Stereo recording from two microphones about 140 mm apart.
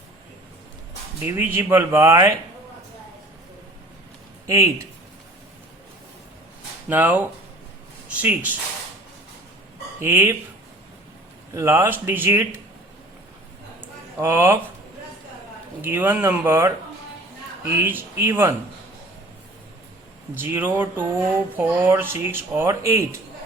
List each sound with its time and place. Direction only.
1.2 s speech: 15° right (ahead or behind)
4.4 s speech: 20° right (ahead or behind)
6.8 s speech: 10° right (ahead or behind)
10.0 s speech: 15° right (ahead or behind)
11.5 s speech: 20° right (ahead or behind)
13.8 s a sound: 15° right (ahead or behind)
15.8 s speech: 15° right (ahead or behind)
20.3 s speech: 15° right (ahead or behind)